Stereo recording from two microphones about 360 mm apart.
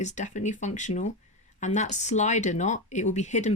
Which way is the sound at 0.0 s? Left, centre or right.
Centre.